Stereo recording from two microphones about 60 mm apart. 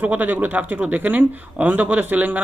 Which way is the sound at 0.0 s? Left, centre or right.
Right.